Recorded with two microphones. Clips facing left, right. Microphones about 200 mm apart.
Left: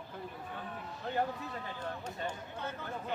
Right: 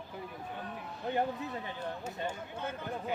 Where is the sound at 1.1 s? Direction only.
15° right (ahead or behind).